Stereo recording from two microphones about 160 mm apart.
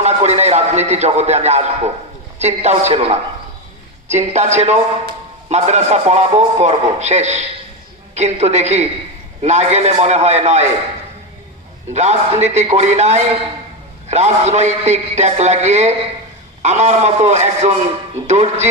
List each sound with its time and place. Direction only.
0.0 s a man's voice: 45° right (ahead or behind)
11.9 s a man's voice: 45° right (ahead or behind)